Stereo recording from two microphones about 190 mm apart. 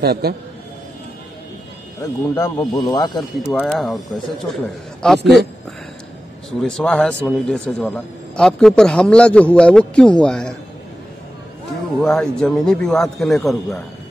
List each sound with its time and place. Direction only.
0.0 s a man's voice: 55° right (ahead or behind)
2.0 s speech: 15° left (ahead or behind)
3.2 s a man's voice: centre (ahead or behind)
6.6 s a man's voice: 5° left (ahead or behind)
12.0 s a man's voice: 5° left (ahead or behind)